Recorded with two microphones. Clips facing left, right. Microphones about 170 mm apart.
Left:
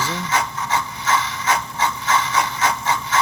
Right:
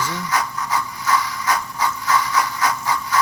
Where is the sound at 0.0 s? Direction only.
25° left (ahead or behind).